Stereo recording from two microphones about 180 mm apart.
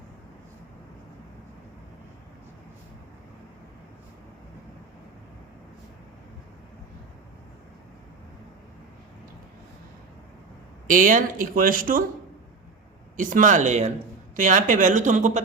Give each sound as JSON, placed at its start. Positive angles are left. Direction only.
{"t": 10.8, "sound": "speech", "side_deg": -50}
{"t": 13.1, "sound": "speech", "side_deg": -45}